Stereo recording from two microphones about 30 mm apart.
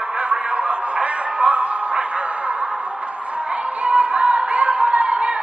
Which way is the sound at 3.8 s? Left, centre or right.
Right.